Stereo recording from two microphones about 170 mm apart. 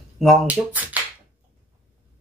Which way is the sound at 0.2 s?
Centre (ahead or behind).